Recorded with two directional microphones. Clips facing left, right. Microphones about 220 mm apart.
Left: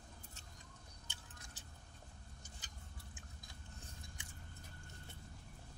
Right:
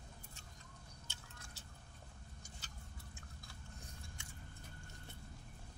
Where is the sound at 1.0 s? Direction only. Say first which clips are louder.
Right 1 dB; 15° left (ahead or behind).